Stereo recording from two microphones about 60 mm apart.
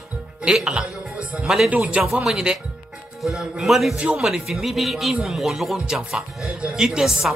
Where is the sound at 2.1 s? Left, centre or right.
Centre.